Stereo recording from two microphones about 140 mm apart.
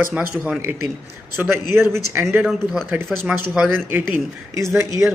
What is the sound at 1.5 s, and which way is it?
Speech, 15° right (ahead or behind).